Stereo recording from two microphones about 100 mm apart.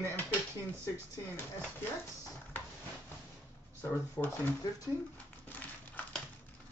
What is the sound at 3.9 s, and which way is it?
Speech, 20° left (ahead or behind).